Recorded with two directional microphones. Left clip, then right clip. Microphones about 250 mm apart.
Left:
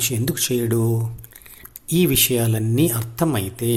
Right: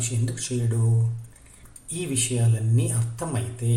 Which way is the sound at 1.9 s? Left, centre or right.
Left.